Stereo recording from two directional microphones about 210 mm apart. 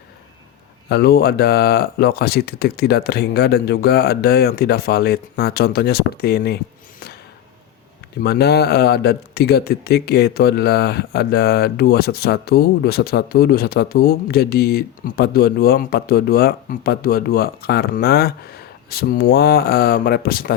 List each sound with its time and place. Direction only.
0.9 s speech: 50° left (ahead or behind)
8.2 s speech: 50° left (ahead or behind)